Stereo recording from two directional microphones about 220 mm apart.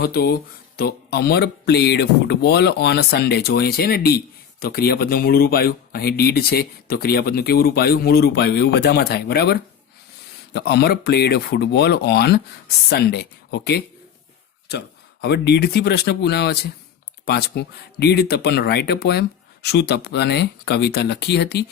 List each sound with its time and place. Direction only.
0.0 s speech: 45° left (ahead or behind)
15.2 s speech: 50° left (ahead or behind)